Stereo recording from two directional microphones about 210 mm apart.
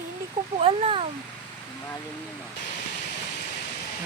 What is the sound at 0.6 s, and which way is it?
Speech, 25° right (ahead or behind).